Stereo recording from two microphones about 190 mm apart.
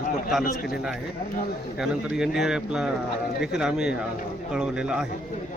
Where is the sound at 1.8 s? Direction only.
5° right (ahead or behind).